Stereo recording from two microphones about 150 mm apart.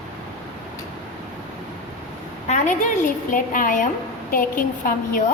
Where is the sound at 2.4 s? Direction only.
55° left (ahead or behind); by 5.2 s 70° left (ahead or behind).